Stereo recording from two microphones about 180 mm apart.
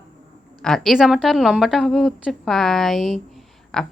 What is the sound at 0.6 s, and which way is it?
Speech, centre (ahead or behind).